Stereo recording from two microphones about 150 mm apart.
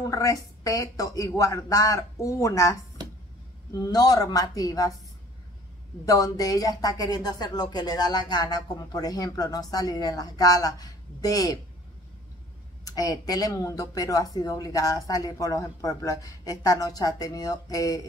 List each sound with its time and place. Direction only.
0.0 s a woman's voice: 20° left (ahead or behind)
3.0 s a sound: 30° right (ahead or behind)
3.8 s a woman's voice: 25° left (ahead or behind)
6.0 s a woman's voice: 25° left (ahead or behind)
12.8 s a woman's voice: 25° left (ahead or behind)